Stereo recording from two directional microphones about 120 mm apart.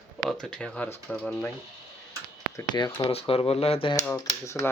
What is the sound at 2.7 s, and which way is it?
Speech, 35° left (ahead or behind).